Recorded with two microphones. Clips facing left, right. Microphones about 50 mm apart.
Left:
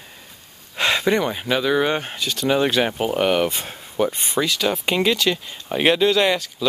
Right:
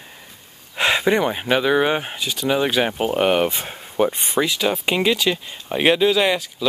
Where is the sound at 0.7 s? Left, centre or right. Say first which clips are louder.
Right 1 dB; centre.